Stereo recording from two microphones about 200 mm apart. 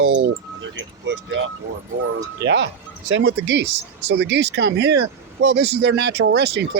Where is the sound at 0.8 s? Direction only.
65° right (ahead or behind).